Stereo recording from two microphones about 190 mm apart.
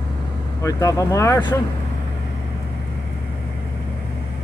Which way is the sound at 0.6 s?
15° left (ahead or behind).